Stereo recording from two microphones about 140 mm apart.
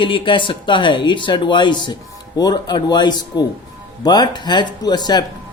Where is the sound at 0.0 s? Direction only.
35° left (ahead or behind).